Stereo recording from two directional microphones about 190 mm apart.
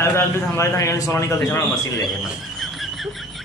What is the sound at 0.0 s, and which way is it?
A man's voice, 15° left (ahead or behind).